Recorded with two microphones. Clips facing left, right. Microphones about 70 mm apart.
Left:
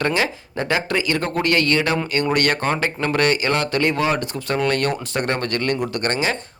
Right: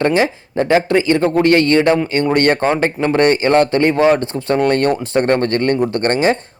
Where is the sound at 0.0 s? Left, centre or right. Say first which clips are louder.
Right 6 dB; right.